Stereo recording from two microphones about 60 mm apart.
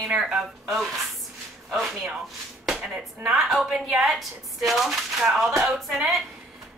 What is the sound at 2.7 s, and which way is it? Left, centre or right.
Music, centre.